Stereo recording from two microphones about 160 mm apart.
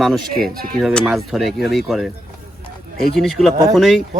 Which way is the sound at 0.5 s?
65° right (ahead or behind).